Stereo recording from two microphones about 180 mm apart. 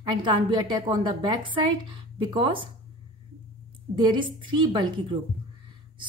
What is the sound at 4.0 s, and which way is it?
A woman's voice, 25° right (ahead or behind).